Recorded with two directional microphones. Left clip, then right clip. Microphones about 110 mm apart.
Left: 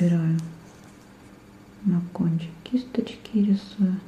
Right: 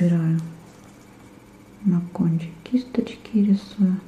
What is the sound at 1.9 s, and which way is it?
Whispering, 15° right (ahead or behind).